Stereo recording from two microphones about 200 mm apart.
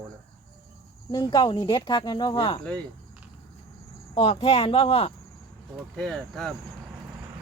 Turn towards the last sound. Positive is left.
turn(degrees=0)  # may be behind; listen again after turning